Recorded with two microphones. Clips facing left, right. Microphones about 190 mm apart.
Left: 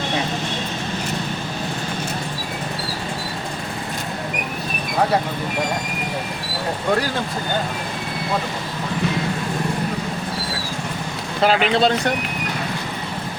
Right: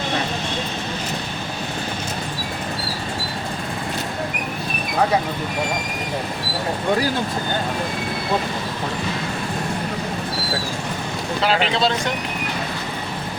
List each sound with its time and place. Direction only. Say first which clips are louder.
11.4 s speech: left 3 dB; 50° left (ahead or behind)